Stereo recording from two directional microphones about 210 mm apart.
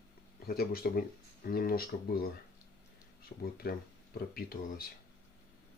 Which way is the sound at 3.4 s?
45° left (ahead or behind).